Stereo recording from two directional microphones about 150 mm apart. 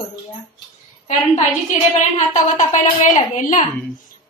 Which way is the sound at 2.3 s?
55° left (ahead or behind).